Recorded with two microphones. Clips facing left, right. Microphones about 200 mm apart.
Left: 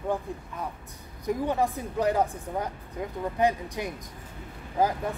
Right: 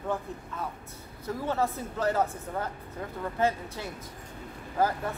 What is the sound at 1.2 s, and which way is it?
A man's voice, 15° left (ahead or behind).